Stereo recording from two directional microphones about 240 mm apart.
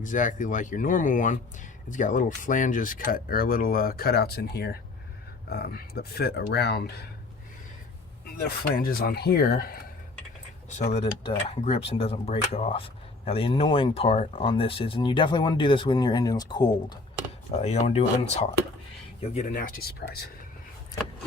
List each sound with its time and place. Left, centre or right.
0.0 s speech: left
8.4 s speech: left
10.7 s speech: left